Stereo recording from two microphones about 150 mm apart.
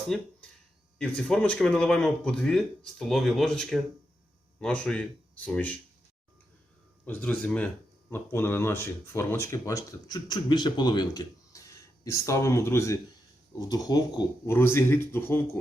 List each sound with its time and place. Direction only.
0.1 s speech: centre (ahead or behind)
7.0 s speech: 10° left (ahead or behind); by 14.5 s 25° left (ahead or behind)
14.5 s speech: 15° left (ahead or behind)